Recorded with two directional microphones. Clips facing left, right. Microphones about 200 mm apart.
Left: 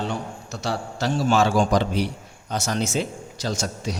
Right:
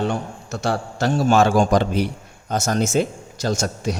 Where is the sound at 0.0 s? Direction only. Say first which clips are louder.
Right 5 dB; 55° right (ahead or behind).